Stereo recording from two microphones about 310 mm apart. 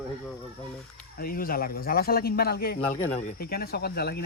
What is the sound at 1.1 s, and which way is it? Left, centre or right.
Speech, left.